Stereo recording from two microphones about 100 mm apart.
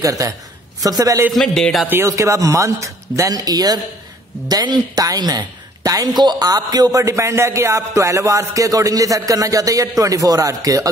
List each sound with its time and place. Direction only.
0.0 s speech: 35° right (ahead or behind)
1.3 s speech: 5° left (ahead or behind)
1.9 s speech: 30° right (ahead or behind)